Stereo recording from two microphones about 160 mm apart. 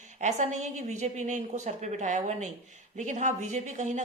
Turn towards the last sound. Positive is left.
turn(degrees=-50)  # may be behind; listen again after turning